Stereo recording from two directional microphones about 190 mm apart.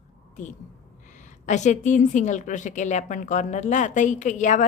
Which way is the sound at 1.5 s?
40° left (ahead or behind).